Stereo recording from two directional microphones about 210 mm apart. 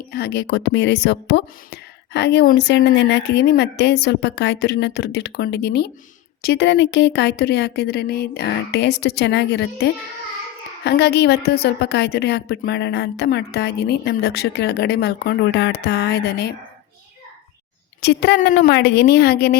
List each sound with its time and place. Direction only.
0.1 s speech: 50° left (ahead or behind)
18.0 s speech: 50° left (ahead or behind)